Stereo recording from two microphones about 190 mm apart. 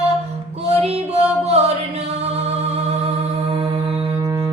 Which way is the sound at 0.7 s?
30° right (ahead or behind).